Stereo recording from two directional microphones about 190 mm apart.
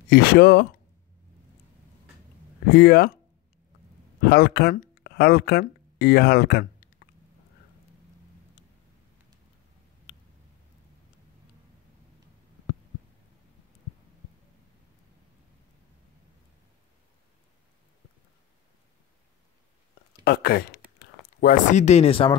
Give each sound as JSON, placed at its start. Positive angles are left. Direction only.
{"t": 0.1, "sound": "speech", "side_deg": 55}
{"t": 2.7, "sound": "speech", "side_deg": 55}
{"t": 4.2, "sound": "speech", "side_deg": 55}
{"t": 20.2, "sound": "speech", "side_deg": 55}
{"t": 21.4, "sound": "speech", "side_deg": 45}